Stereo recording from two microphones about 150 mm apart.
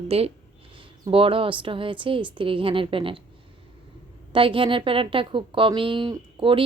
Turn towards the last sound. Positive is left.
turn(degrees=-35)  # may be behind; listen again after turning